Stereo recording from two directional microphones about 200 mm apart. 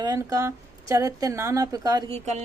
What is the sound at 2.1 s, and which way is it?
Speech, 35° right (ahead or behind).